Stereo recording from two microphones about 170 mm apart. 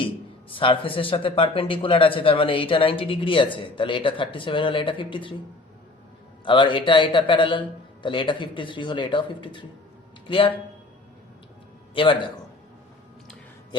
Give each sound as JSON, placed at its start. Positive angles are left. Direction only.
{"t": 0.5, "sound": "a man's voice", "side_deg": 30}
{"t": 6.4, "sound": "a man's voice", "side_deg": 30}
{"t": 11.9, "sound": "a man's voice", "side_deg": 30}